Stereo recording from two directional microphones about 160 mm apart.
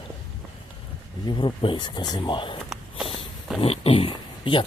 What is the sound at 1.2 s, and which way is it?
Speech, 30° left (ahead or behind).